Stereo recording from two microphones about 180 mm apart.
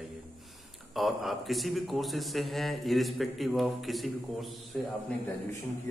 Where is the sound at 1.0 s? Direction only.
Centre (ahead or behind).